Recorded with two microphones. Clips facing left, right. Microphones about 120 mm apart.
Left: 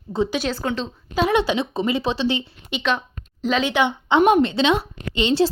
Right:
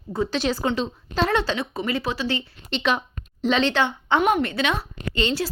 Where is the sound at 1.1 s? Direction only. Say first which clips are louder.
Left 3 dB; 10° left (ahead or behind).